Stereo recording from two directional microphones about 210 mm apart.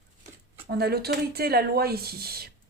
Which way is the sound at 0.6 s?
50° right (ahead or behind).